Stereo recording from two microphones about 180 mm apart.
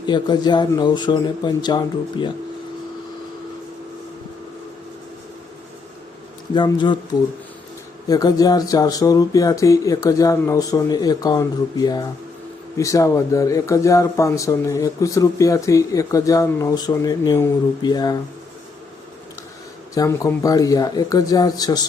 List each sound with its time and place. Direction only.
0.0 s speech: 25° left (ahead or behind)
6.5 s speech: 25° left (ahead or behind)
19.9 s speech: 15° left (ahead or behind)